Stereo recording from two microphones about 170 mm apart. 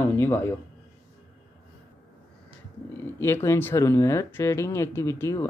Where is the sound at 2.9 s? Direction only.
15° left (ahead or behind).